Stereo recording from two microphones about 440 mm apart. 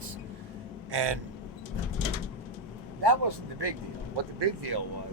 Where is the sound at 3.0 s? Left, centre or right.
Right.